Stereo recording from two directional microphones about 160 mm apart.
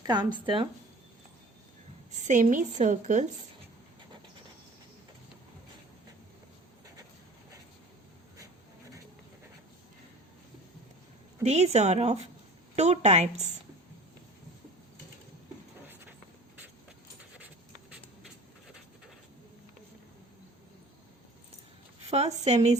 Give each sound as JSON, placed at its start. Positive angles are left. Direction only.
{"t": 0.0, "sound": "speech", "side_deg": -25}
{"t": 2.1, "sound": "speech", "side_deg": -50}
{"t": 11.4, "sound": "speech", "side_deg": -45}
{"t": 22.1, "sound": "speech", "side_deg": -45}